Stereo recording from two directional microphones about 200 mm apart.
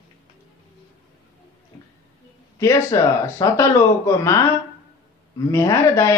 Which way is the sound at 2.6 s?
15° left (ahead or behind).